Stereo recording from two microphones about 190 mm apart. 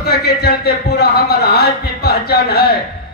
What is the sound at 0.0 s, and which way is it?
A man's voice, 55° left (ahead or behind).